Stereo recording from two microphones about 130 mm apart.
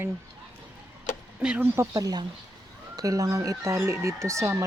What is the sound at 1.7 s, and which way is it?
Speech, 25° right (ahead or behind).